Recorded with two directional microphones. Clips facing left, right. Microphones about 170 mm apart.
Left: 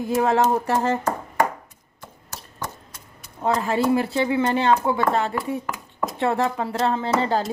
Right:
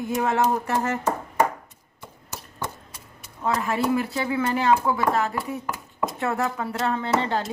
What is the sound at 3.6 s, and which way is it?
Speech, 30° left (ahead or behind).